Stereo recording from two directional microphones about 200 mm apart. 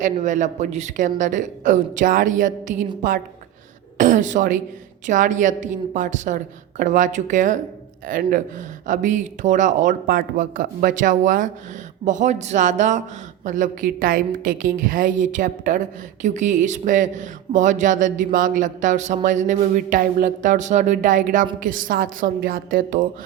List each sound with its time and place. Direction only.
0.0 s a woman's voice: 40° right (ahead or behind)